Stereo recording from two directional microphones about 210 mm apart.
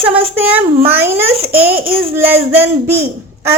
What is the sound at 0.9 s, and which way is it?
Speech, 10° right (ahead or behind).